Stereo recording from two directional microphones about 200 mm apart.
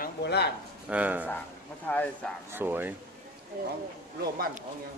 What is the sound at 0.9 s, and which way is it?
Speech, 10° right (ahead or behind).